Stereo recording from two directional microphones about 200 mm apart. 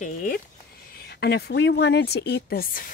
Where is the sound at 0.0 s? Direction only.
45° left (ahead or behind).